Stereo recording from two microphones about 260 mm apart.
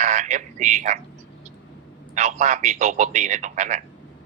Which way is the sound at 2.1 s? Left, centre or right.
Right.